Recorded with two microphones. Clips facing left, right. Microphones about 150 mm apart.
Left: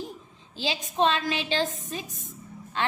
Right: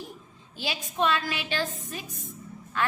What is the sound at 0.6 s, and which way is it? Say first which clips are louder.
A woman's voice: left 3 dB; 20° left (ahead or behind).